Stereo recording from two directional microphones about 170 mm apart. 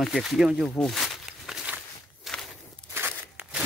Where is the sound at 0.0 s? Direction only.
Centre (ahead or behind).